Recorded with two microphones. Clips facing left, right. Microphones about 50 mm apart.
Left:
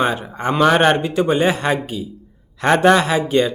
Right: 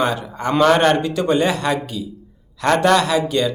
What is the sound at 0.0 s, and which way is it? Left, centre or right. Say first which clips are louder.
Speech: left 1 dB; left.